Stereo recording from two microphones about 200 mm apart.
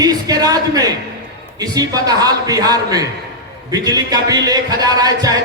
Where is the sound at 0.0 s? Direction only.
20° right (ahead or behind).